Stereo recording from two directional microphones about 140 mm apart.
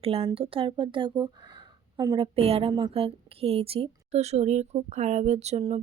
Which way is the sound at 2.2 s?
45° right (ahead or behind).